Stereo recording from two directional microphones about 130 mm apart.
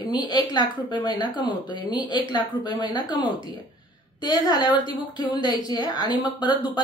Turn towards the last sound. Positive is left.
turn(degrees=35)  # may be behind; listen again after turning